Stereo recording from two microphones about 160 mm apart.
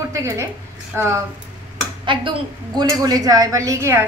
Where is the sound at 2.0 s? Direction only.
30° right (ahead or behind).